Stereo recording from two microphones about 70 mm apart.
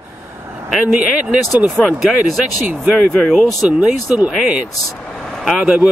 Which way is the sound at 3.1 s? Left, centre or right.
Centre.